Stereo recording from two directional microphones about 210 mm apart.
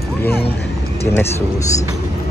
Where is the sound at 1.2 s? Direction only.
15° left (ahead or behind).